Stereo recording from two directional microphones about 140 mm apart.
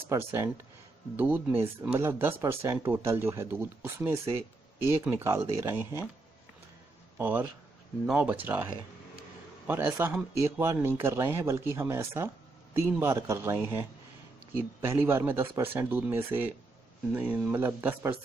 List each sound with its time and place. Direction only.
0.1 s speech: 20° right (ahead or behind)
7.2 s speech: 15° right (ahead or behind)
9.7 s speech: 15° right (ahead or behind)